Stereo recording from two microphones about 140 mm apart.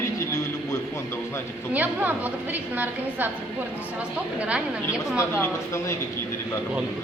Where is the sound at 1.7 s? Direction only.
10° right (ahead or behind).